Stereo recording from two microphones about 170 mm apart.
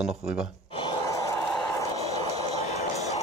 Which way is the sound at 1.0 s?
20° left (ahead or behind).